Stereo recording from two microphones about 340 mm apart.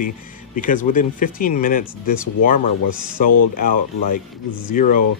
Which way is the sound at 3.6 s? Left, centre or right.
Left.